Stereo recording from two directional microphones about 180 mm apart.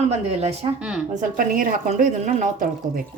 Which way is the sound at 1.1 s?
45° right (ahead or behind).